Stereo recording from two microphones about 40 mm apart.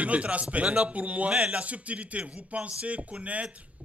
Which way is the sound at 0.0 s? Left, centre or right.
Right.